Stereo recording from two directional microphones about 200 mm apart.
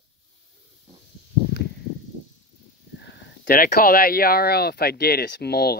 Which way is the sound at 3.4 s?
50° left (ahead or behind).